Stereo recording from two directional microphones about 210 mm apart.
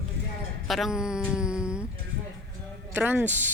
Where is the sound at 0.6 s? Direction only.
Centre (ahead or behind).